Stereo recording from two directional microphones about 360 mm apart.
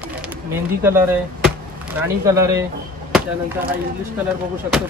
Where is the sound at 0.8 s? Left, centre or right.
Centre.